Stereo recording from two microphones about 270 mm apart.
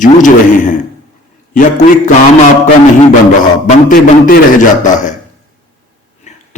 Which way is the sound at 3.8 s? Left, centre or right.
Left.